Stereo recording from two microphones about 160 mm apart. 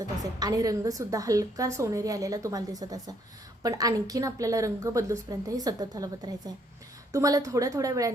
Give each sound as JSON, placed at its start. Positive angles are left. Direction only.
{"t": 0.2, "sound": "a woman's voice", "side_deg": -25}